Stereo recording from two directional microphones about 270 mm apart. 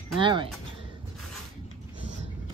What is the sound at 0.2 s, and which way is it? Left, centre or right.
Speech, centre.